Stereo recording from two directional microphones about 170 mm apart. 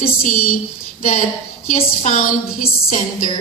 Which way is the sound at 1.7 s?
50° left (ahead or behind).